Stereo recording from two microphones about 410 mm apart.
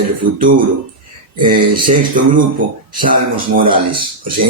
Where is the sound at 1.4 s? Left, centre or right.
Centre.